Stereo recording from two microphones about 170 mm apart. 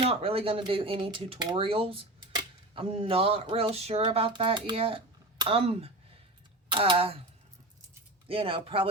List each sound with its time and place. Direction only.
0.0 s speech: 35° right (ahead or behind)
8.3 s speech: 30° right (ahead or behind)